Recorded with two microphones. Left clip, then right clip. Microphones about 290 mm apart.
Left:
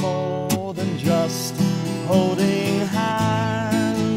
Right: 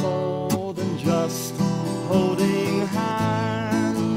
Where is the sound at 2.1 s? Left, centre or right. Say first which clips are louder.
Left 2 dB; left.